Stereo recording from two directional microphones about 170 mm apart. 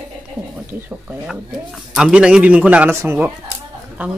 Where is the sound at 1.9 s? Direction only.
5° right (ahead or behind).